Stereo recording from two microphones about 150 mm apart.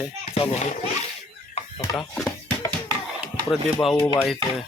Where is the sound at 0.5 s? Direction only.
50° left (ahead or behind).